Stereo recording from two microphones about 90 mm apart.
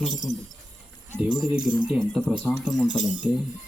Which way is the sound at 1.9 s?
10° right (ahead or behind).